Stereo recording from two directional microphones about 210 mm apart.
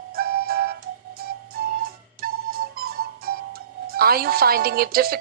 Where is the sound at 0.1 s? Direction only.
45° right (ahead or behind).